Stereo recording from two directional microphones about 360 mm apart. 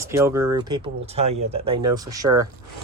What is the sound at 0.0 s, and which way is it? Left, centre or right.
Speech, centre.